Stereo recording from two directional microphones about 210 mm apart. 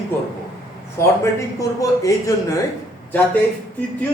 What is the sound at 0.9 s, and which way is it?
A man's voice, 15° left (ahead or behind).